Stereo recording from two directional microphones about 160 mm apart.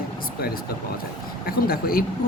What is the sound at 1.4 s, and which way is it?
Speech, 65° left (ahead or behind).